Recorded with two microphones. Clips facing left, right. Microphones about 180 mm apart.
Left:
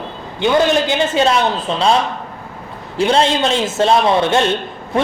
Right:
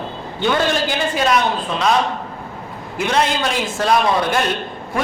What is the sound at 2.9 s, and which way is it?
A man's voice, 30° left (ahead or behind).